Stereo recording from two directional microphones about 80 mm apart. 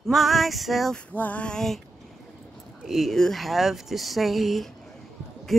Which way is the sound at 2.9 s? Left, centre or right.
Centre.